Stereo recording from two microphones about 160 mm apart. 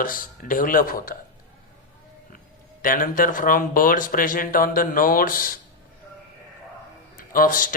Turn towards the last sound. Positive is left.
turn(degrees=60)  # may be behind; listen again after turning